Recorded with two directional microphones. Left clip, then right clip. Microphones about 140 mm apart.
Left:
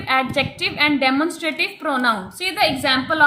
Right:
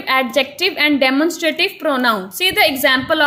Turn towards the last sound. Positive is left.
turn(degrees=-55)  # may be behind; listen again after turning